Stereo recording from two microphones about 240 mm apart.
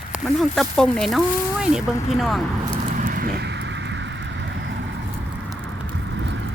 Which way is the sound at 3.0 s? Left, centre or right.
Right.